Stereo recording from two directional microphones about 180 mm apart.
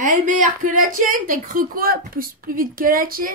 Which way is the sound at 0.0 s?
45° right (ahead or behind).